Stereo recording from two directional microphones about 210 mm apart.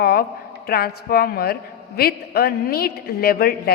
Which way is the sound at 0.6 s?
45° left (ahead or behind).